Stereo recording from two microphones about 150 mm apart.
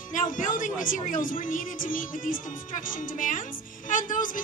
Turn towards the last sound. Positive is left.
turn(degrees=60)  # may be behind; listen again after turning